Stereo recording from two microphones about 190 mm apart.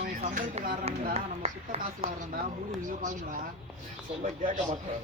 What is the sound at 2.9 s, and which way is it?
Speech, 45° right (ahead or behind).